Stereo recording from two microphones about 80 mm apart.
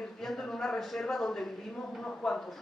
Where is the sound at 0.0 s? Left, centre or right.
Centre.